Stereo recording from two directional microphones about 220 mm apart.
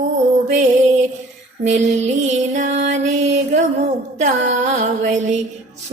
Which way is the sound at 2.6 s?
30° right (ahead or behind).